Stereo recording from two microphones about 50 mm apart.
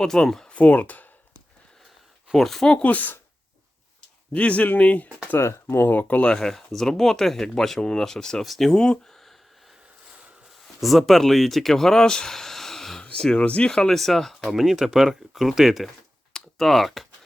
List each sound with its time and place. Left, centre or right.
0.0 s speech: centre
0.4 s speech: left
2.3 s speech: centre
2.7 s speech: left
4.3 s speech: left
5.4 s speech: left
5.9 s speech: left
6.2 s speech: centre
8.7 s speech: centre
10.8 s speech: centre
13.0 s a sound: centre
13.4 s speech: left
13.7 s speech: centre
14.5 s speech: centre